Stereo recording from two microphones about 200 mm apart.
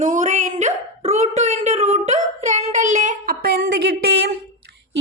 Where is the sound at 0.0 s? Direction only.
40° right (ahead or behind).